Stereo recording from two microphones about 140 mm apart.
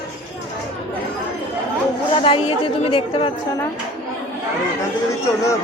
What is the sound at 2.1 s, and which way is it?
Speech, 40° left (ahead or behind).